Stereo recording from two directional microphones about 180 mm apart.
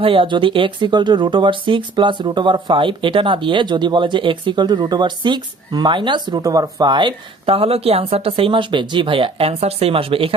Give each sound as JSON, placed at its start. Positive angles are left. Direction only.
{"t": 0.0, "sound": "speech", "side_deg": -30}